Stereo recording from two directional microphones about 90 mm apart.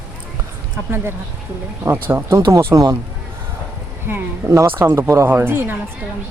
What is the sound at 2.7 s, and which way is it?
Speech, 40° right (ahead or behind).